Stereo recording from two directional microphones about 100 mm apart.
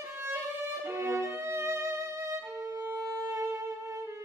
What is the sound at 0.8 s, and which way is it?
Violin, 25° right (ahead or behind).